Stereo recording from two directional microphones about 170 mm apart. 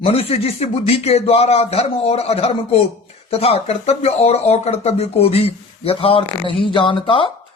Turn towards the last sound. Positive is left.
turn(degrees=30)  # may be behind; listen again after turning